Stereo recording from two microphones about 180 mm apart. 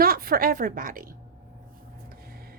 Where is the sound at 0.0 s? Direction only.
55° right (ahead or behind).